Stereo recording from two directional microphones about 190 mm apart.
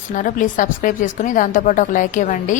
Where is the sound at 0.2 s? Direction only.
45° left (ahead or behind).